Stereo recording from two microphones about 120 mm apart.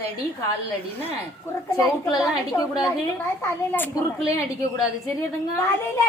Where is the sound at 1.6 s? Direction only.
30° left (ahead or behind).